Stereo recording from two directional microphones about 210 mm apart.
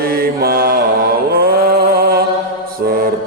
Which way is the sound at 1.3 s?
45° right (ahead or behind).